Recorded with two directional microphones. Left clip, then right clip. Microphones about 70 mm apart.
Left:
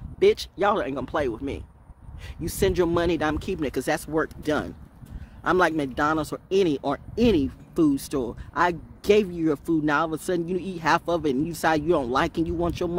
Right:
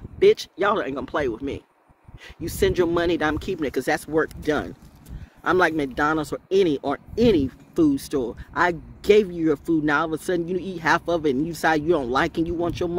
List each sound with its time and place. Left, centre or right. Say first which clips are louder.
0.2 s speech: right 2 dB; left
3.5 s speech: right 2 dB; left
4.1 s speech: right 3 dB; left